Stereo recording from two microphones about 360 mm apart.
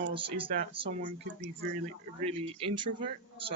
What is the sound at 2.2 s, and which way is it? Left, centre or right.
Speech, centre.